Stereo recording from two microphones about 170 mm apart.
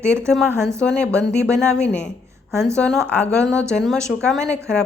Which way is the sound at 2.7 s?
5° left (ahead or behind).